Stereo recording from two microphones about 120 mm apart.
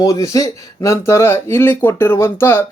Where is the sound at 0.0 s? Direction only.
25° left (ahead or behind).